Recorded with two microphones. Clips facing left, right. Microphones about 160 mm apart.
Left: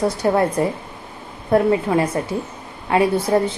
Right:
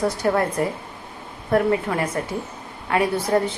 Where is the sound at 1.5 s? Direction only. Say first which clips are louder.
Left 4 dB; 25° left (ahead or behind).